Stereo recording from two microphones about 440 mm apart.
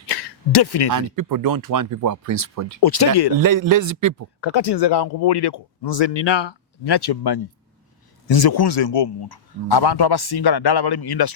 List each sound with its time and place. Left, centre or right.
0.1 s a sound: left
0.9 s speech: right
2.8 s speech: left
3.3 s speech: right
4.4 s speech: left